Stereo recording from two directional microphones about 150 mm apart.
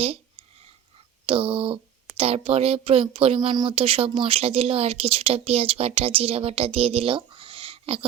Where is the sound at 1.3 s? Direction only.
40° right (ahead or behind).